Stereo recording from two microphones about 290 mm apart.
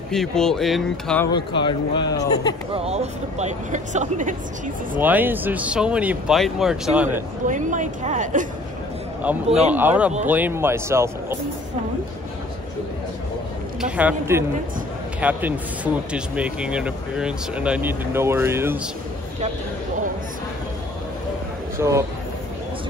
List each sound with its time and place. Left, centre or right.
0.1 s speech: centre
2.7 s speech: right
5.0 s speech: centre
7.4 s speech: right
9.2 s speech: centre
13.7 s speech: centre
21.7 s speech: centre